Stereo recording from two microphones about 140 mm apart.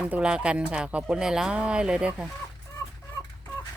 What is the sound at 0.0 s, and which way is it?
Speech, 5° right (ahead or behind).